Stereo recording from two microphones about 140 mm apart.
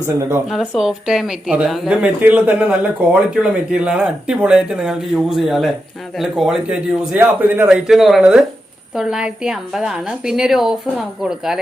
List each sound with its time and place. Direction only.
0.0 s a man's voice: 15° right (ahead or behind)
0.4 s a man's voice: centre (ahead or behind)
7.7 s speech: centre (ahead or behind)